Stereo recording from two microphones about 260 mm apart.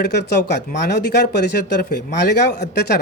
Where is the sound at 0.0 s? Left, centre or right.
Left.